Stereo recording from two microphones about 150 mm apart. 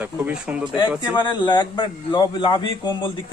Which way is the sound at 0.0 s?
10° right (ahead or behind).